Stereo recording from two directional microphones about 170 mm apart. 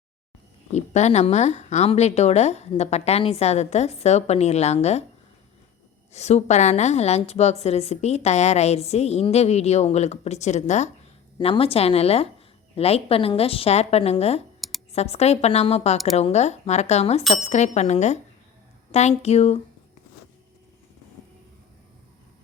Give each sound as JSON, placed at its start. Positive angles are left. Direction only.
{"t": 0.7, "sound": "a woman's voice", "side_deg": 40}
{"t": 6.1, "sound": "a woman's voice", "side_deg": 40}
{"t": 14.6, "sound": "a sound", "side_deg": 0}
{"t": 14.9, "sound": "a woman's voice", "side_deg": 40}